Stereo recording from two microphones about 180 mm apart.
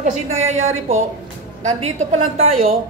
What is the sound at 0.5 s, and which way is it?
Speech, 40° right (ahead or behind).